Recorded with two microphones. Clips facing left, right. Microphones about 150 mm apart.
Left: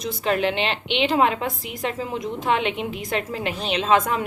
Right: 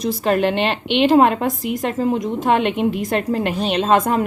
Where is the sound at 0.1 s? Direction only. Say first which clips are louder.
Right 4 dB; 45° right (ahead or behind).